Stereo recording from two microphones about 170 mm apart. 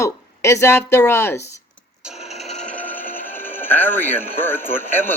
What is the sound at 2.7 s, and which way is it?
Speech, 10° left (ahead or behind).